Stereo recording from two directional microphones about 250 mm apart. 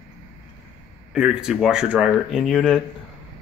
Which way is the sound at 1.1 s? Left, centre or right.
Centre.